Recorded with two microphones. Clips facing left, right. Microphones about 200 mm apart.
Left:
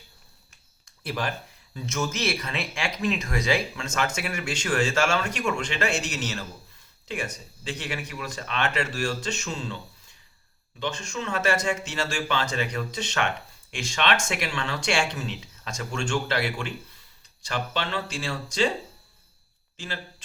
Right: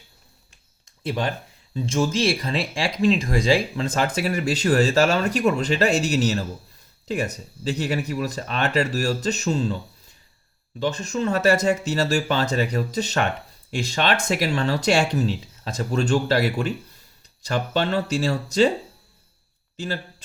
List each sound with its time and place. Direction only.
1.0 s speech: 25° right (ahead or behind); by 9.7 s 40° right (ahead or behind)
10.8 s speech: 40° right (ahead or behind)